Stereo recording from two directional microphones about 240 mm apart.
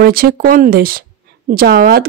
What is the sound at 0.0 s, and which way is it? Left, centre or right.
Speech, right.